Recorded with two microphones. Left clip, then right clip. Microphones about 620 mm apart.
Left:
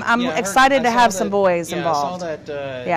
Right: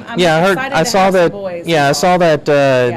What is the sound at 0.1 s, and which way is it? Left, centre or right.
Speech, left.